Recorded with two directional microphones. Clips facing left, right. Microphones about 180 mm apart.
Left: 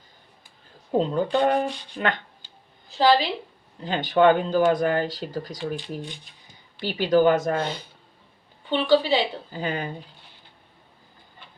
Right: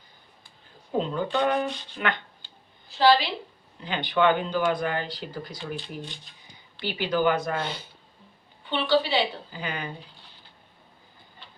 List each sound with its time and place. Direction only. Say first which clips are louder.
0.9 s speech: left 4 dB; 35° left (ahead or behind)
3.0 s a woman's voice: left 1 dB; 45° left (ahead or behind)
6.7 s a woman's voice: left 6 dB; 40° left (ahead or behind)
8.7 s a woman's voice: left 4 dB; 45° left (ahead or behind)